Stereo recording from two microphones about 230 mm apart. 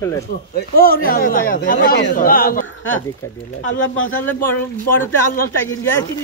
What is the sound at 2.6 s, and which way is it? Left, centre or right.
Speech, left.